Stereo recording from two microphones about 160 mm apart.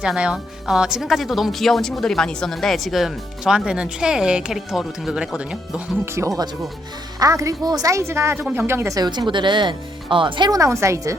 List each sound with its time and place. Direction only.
0.0 s speech: 5° right (ahead or behind)
6.1 s a woman's voice: 20° right (ahead or behind)